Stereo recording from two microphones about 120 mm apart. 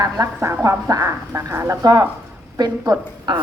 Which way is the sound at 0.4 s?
25° right (ahead or behind).